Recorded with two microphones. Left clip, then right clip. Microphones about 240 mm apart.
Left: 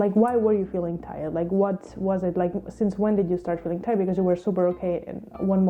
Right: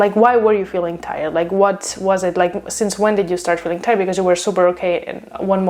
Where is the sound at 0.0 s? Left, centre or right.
Centre.